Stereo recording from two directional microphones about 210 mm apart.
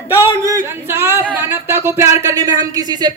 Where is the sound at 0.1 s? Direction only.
15° right (ahead or behind).